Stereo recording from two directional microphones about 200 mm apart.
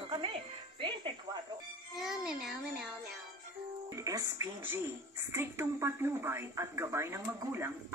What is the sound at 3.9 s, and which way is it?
A woman's voice, 15° right (ahead or behind).